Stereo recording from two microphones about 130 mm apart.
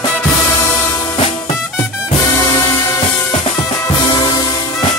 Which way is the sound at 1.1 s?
45° left (ahead or behind).